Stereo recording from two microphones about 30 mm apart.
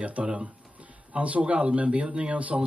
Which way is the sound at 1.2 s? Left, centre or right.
Right.